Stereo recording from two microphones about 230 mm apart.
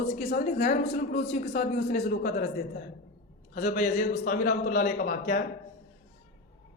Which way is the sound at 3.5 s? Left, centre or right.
Left.